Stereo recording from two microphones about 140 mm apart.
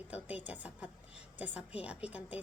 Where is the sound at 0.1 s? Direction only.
10° right (ahead or behind).